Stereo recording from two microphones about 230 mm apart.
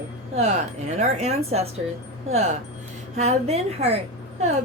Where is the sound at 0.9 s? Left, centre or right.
Right.